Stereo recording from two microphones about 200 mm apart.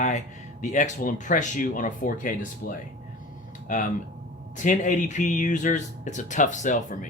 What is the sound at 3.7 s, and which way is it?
Speech, 40° left (ahead or behind).